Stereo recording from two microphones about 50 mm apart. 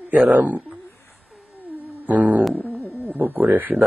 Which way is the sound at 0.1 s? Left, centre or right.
Right.